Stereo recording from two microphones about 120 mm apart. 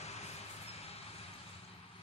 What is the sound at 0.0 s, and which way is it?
Vehicle, 60° left (ahead or behind).